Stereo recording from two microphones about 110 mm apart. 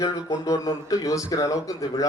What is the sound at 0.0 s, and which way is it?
A man's voice, 30° left (ahead or behind).